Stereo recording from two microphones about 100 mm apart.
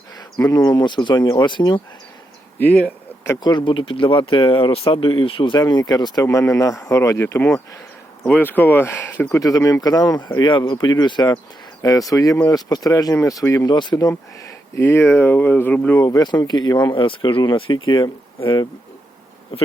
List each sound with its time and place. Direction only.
0.4 s speech: 40° left (ahead or behind)
2.6 s speech: 15° left (ahead or behind)
3.4 s speech: 50° left (ahead or behind)
6.2 s speech: 30° left (ahead or behind)
9.3 s speech: 35° left (ahead or behind)
13.7 s speech: 45° left (ahead or behind)
14.1 s speech: 25° left (ahead or behind)
16.0 s speech: 40° left (ahead or behind)